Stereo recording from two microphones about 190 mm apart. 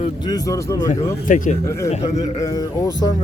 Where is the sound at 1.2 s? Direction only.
40° left (ahead or behind).